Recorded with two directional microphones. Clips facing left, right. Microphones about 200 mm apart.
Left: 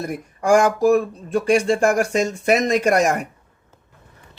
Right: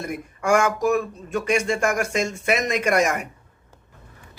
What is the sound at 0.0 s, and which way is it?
Speech, 35° left (ahead or behind).